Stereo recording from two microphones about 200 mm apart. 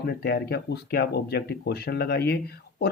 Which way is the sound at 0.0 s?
55° left (ahead or behind).